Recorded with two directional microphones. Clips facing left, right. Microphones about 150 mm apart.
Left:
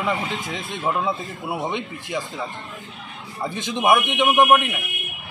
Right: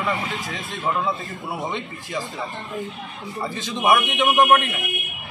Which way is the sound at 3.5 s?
20° left (ahead or behind).